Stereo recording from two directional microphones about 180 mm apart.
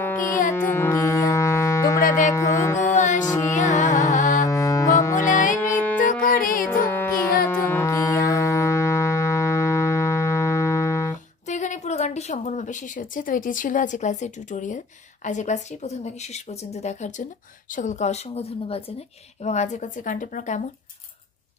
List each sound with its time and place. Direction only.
0.0 s music: 15° left (ahead or behind)
2.0 s music: 45° left (ahead or behind)
2.3 s music: 15° left (ahead or behind)
2.9 s music: 45° left (ahead or behind)
3.3 s music: 20° left (ahead or behind)
3.5 s music: 45° left (ahead or behind)
4.5 s music: 20° left (ahead or behind)
5.3 s music: 45° left (ahead or behind)
5.6 s music: 10° left (ahead or behind)
6.0 s music: 50° left (ahead or behind)
6.7 s dog: 10° left (ahead or behind)
7.4 s music: 15° left (ahead or behind)
11.4 s a woman's voice: 40° left (ahead or behind)